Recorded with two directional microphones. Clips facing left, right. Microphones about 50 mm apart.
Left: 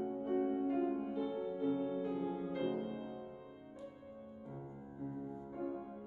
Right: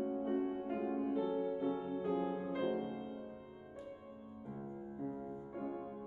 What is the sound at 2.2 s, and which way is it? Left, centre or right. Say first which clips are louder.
Music: right 1 dB; right.